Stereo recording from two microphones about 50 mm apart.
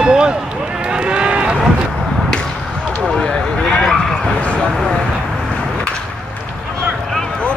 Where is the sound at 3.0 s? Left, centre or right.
Centre.